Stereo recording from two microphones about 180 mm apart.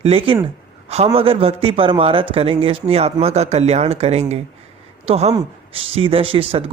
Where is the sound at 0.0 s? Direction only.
30° right (ahead or behind).